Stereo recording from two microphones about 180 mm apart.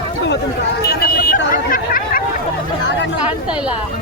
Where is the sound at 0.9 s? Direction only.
55° left (ahead or behind).